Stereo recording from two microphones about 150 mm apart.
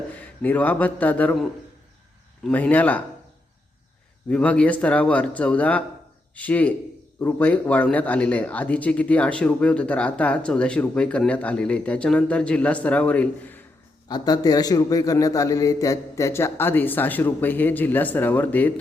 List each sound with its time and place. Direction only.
0.4 s speech: 10° left (ahead or behind)
4.3 s speech: 10° left (ahead or behind)
14.1 s speech: 25° left (ahead or behind)